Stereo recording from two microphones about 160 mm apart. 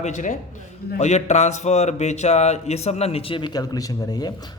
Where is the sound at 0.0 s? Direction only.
50° left (ahead or behind).